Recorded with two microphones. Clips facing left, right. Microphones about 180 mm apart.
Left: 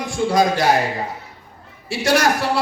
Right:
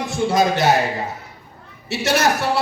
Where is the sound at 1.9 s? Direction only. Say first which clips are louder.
Left 1 dB; 25° right (ahead or behind).